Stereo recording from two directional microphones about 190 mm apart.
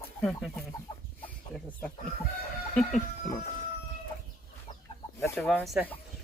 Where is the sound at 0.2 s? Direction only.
5° left (ahead or behind).